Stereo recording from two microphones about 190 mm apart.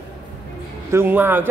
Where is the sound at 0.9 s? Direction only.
10° right (ahead or behind).